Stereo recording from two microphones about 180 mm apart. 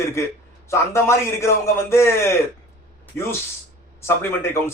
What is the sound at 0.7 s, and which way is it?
A man's voice, 15° left (ahead or behind).